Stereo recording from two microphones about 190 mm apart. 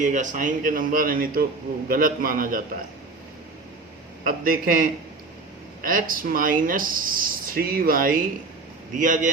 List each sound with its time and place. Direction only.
0.0 s speech: 40° right (ahead or behind)
4.2 s speech: 50° right (ahead or behind)